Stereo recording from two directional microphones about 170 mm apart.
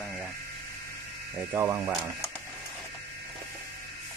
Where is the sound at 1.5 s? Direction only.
15° right (ahead or behind).